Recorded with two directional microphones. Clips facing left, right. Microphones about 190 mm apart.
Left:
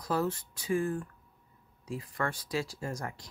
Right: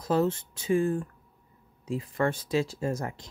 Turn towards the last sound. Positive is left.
turn(degrees=-25)  # may be behind; listen again after turning